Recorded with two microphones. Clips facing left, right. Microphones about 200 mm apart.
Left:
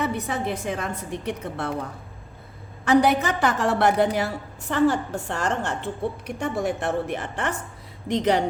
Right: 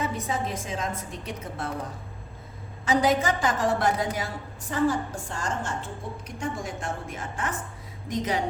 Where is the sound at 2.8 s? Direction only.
65° left (ahead or behind).